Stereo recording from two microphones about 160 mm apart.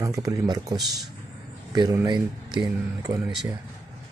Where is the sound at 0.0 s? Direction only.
20° right (ahead or behind).